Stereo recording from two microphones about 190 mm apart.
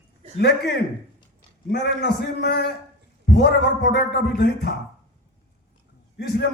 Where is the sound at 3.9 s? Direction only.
60° left (ahead or behind).